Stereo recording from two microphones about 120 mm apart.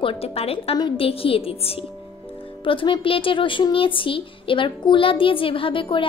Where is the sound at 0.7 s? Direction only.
45° left (ahead or behind).